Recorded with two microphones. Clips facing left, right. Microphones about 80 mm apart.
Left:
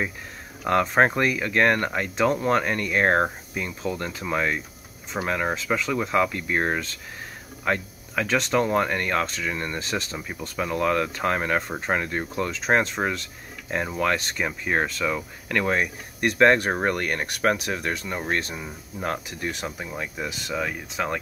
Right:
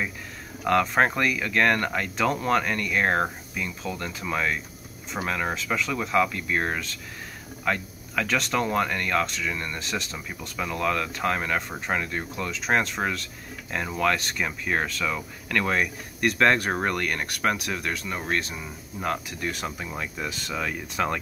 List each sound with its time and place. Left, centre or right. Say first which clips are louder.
0.7 s speech: left 1 dB; left
19.0 s speech: even; left